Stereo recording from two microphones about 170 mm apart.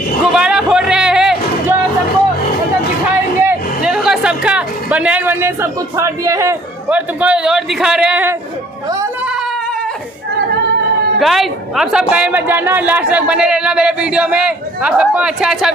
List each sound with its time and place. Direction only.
0.2 s music: 5° right (ahead or behind)
3.4 s a sound: 5° right (ahead or behind)
6.9 s speech: 10° right (ahead or behind)
11.1 s speech: centre (ahead or behind)